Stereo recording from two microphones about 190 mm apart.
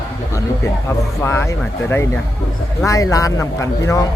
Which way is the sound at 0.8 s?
15° left (ahead or behind).